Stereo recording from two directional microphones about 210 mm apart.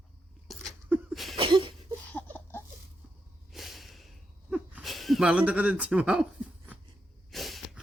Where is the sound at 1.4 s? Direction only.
25° right (ahead or behind).